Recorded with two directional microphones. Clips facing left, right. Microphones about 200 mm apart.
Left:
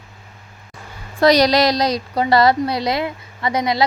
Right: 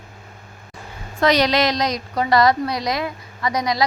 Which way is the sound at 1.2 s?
35° left (ahead or behind).